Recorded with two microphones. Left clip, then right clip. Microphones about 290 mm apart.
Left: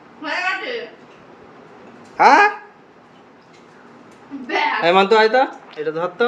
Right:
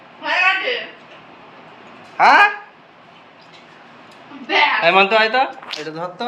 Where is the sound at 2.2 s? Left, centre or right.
Centre.